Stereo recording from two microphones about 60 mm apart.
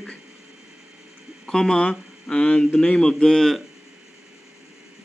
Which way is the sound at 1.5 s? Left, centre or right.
Centre.